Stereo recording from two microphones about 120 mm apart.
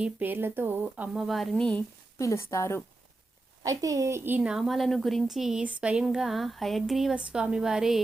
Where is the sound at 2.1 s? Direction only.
25° left (ahead or behind).